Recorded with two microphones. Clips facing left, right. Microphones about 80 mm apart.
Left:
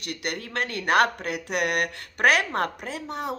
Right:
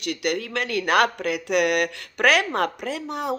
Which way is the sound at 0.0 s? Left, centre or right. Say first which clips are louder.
Right 6 dB; left.